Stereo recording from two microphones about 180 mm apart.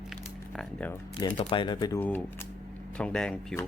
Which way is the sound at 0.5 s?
10° left (ahead or behind).